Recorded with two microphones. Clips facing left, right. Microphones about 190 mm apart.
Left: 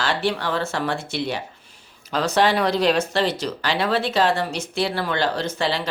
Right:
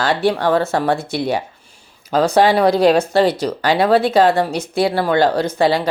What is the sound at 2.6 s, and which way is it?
Speech, 55° right (ahead or behind).